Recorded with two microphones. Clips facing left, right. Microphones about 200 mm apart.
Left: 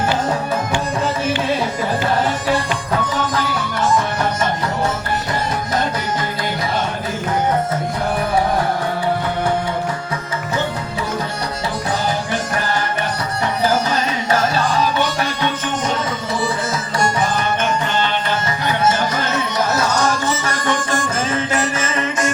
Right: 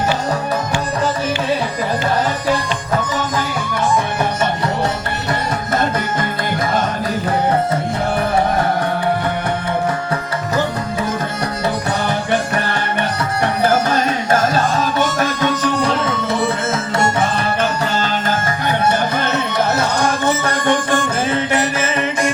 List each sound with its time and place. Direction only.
12.0 s music: 65° right (ahead or behind); by 17.7 s 25° right (ahead or behind)
17.9 s music: 45° right (ahead or behind); by 22.3 s 60° right (ahead or behind)